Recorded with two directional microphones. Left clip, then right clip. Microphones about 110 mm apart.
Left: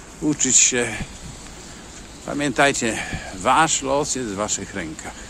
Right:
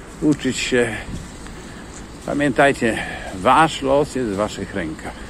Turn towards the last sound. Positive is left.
turn(degrees=40)  # may be behind; listen again after turning